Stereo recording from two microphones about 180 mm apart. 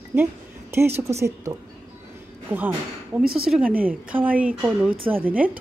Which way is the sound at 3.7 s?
50° right (ahead or behind).